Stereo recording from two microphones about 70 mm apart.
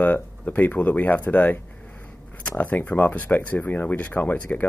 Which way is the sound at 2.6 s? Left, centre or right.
Left.